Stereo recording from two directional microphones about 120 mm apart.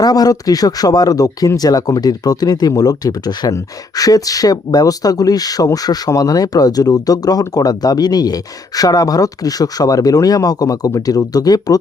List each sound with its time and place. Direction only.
0.0 s speech: 30° left (ahead or behind)